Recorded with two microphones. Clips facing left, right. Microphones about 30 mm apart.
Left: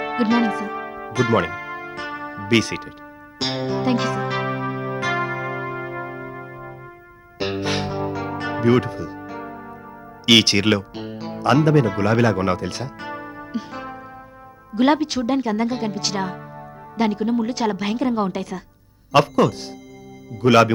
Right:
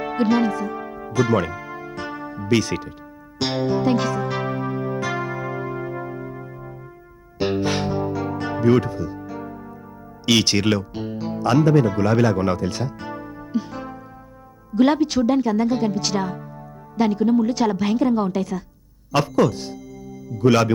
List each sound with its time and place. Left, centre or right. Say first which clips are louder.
0.0 s music: even; left
2.5 s speech: left 1 dB; left
3.3 s music: right 2 dB; left
10.2 s speech: left 3 dB; left
20.5 s speech: left 3 dB; left